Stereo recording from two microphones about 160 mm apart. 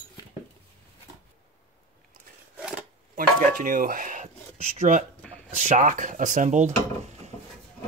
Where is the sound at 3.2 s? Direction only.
60° right (ahead or behind).